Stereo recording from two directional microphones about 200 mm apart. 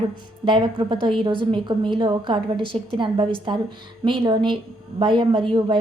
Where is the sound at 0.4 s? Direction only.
25° right (ahead or behind).